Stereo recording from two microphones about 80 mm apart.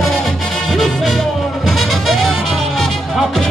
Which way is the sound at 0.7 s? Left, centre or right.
Centre.